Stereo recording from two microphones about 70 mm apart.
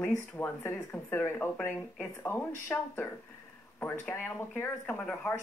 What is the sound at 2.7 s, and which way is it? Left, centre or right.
Speech, centre.